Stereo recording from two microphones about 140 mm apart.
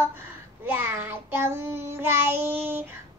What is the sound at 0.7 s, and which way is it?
Child singing, 15° right (ahead or behind).